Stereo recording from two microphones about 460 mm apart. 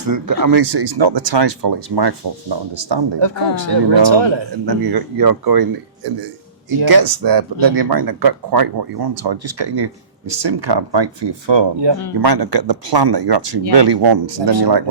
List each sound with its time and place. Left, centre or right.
0.1 s speech: right
6.7 s speech: right